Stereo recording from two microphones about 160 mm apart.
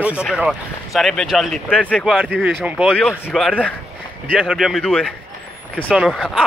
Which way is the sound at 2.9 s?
10° left (ahead or behind).